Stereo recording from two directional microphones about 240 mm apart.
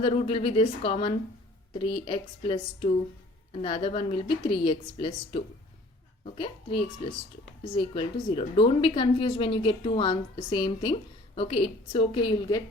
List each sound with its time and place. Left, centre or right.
0.0 s a woman's voice: left